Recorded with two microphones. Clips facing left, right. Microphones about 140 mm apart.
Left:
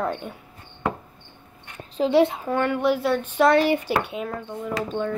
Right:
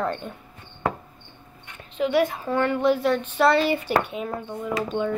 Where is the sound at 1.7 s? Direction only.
35° left (ahead or behind).